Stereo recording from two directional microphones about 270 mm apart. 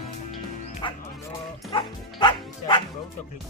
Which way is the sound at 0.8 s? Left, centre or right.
Centre.